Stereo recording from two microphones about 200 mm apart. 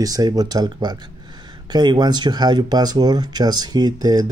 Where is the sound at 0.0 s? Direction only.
20° right (ahead or behind).